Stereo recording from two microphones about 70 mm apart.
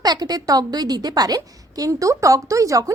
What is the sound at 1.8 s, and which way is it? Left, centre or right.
Speech, right.